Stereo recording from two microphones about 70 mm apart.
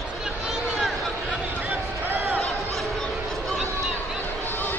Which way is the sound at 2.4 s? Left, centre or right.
Centre.